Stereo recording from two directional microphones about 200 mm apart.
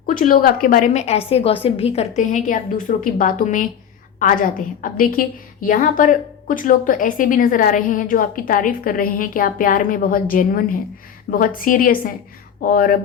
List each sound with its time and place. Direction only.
0.0 s a woman's voice: 45° left (ahead or behind)